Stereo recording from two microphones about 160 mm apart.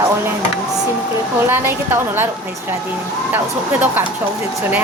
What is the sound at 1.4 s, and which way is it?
Speech, 15° right (ahead or behind).